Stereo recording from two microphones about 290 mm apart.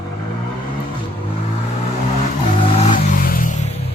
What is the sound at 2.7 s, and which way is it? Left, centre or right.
Vehicle, left.